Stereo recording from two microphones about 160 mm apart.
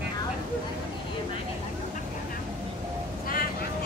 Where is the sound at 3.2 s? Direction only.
65° left (ahead or behind).